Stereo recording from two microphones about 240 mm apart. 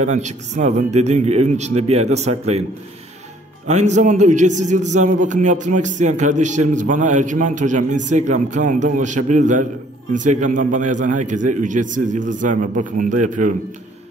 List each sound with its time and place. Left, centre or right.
0.0 s speech: right
3.6 s a man's voice: right